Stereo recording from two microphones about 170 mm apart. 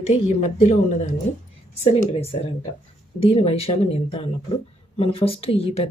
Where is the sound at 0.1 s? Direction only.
40° left (ahead or behind).